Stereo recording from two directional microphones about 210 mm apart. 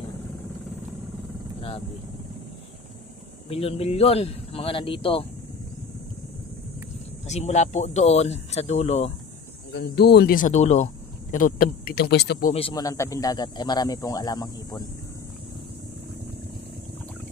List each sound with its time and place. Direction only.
3.4 s a man's voice: 25° left (ahead or behind)
7.2 s speech: 30° left (ahead or behind)
9.7 s speech: 50° left (ahead or behind)
12.5 s a man's voice: 20° left (ahead or behind)